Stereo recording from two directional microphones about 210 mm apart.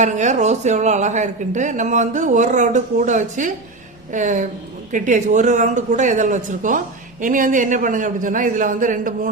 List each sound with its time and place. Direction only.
0.0 s a man's voice: 35° right (ahead or behind)